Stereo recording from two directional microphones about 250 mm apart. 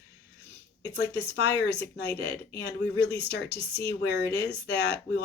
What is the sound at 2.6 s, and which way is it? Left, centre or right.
Speech, left.